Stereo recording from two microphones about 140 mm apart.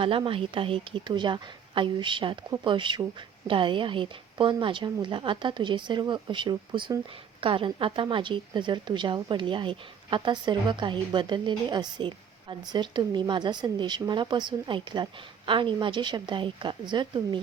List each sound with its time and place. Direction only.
0.0 s a woman's voice: 40° right (ahead or behind)